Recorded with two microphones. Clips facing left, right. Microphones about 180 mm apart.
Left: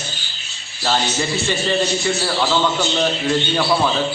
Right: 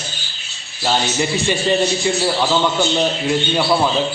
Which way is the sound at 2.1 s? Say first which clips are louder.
Right 2 dB; 15° right (ahead or behind).